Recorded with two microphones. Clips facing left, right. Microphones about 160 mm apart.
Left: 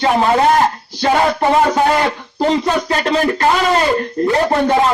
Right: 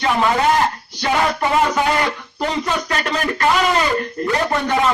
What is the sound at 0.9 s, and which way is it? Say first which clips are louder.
A man's voice: left 4 dB; 30° left (ahead or behind).